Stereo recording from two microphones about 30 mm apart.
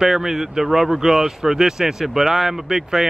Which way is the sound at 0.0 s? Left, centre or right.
Centre.